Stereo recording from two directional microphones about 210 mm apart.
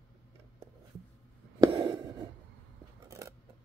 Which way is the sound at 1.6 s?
20° right (ahead or behind).